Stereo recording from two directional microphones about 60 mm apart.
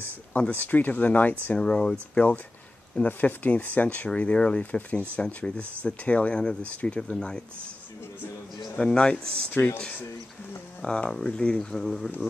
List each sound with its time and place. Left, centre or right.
0.5 s speech: left
1.6 s speech: centre
3.0 s speech: left
8.7 s speech: centre
10.8 s speech: centre